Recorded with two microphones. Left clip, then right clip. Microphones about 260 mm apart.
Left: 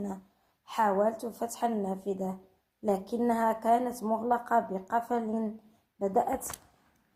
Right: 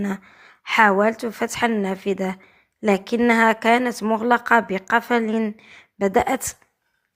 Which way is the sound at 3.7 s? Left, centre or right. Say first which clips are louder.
Right 8 dB; right.